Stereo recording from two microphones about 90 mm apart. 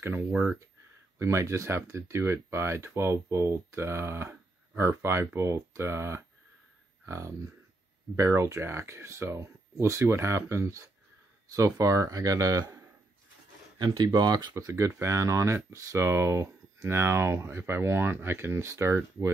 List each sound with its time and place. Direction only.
0.0 s speech: 25° right (ahead or behind)
13.9 s speech: 50° right (ahead or behind)
14.6 s speech: 35° right (ahead or behind)